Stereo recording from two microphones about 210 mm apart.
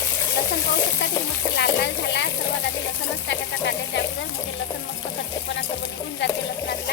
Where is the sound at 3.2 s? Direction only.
55° left (ahead or behind).